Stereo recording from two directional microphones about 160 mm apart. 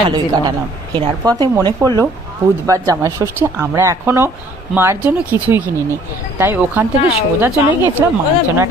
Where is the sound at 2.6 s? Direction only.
20° right (ahead or behind).